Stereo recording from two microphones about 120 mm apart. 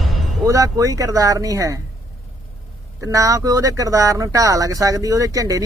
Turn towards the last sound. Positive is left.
turn(degrees=-30)  # may be behind; listen again after turning